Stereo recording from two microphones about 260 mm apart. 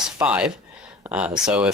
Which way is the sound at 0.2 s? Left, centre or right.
Centre.